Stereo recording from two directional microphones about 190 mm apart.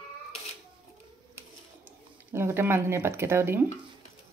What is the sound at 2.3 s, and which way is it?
Speech, 15° right (ahead or behind).